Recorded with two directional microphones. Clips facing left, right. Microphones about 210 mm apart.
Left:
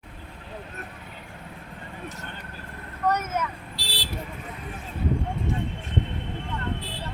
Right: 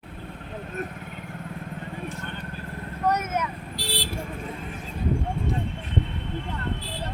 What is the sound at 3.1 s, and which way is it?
Vehicle, 10° right (ahead or behind).